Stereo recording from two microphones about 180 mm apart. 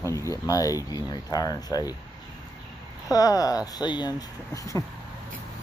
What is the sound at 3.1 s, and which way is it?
Speech, 20° left (ahead or behind).